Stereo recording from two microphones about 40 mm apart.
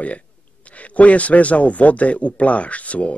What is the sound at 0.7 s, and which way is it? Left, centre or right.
A man's voice, left.